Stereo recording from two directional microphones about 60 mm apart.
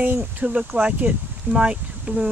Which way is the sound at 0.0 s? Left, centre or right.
Right.